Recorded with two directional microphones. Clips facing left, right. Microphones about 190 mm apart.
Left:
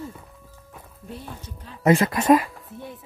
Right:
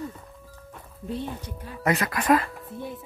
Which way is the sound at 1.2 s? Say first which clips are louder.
Right 5 dB; 10° right (ahead or behind).